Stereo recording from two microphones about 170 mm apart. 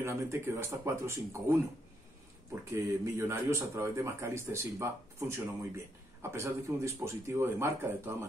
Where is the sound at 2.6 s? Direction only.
15° right (ahead or behind).